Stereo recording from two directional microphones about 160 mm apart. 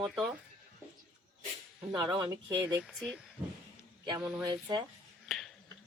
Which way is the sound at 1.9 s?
25° right (ahead or behind).